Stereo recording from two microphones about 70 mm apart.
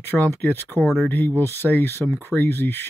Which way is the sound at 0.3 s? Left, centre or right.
Left.